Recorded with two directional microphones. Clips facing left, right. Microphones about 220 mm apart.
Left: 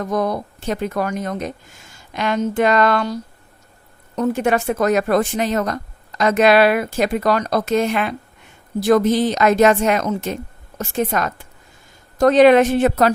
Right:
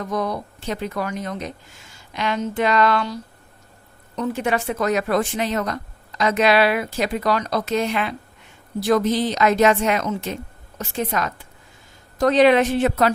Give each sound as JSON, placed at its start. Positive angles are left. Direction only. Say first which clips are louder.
{"t": 0.0, "sound": "speech", "louder": "left 4 dB", "side_deg": 45}